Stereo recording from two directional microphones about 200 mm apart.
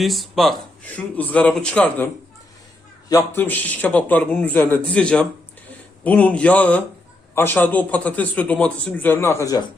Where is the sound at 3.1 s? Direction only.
10° left (ahead or behind).